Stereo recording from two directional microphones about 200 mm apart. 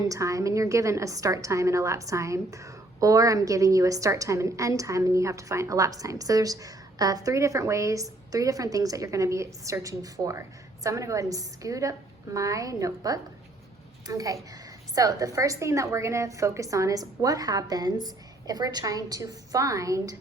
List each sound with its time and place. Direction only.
0.0 s a woman's voice: 15° right (ahead or behind)